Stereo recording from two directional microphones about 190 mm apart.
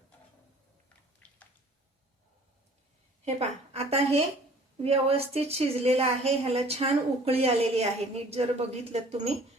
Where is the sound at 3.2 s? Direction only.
35° right (ahead or behind).